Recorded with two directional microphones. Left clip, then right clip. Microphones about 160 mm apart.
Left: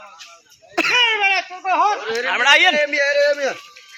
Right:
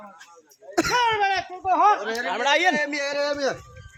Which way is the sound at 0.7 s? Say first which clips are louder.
Left 5 dB; 35° right (ahead or behind).